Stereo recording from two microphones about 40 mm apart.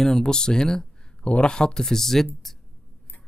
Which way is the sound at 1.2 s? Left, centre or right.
Left.